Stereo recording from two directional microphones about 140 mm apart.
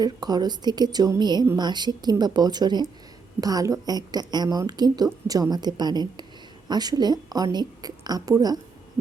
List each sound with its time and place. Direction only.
0.0 s a woman's voice: 30° right (ahead or behind)